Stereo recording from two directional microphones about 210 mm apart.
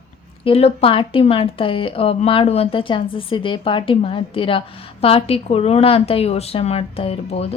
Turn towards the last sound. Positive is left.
turn(degrees=30)  # may be behind; listen again after turning